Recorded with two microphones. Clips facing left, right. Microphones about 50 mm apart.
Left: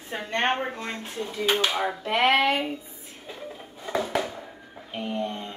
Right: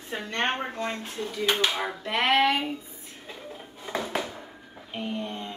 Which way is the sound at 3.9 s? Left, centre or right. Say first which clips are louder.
Left 4 dB; centre.